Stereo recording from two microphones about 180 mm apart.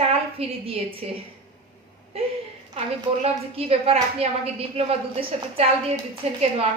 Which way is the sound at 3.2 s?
35° right (ahead or behind).